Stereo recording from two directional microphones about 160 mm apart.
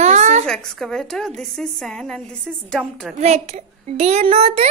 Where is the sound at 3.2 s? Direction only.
45° right (ahead or behind).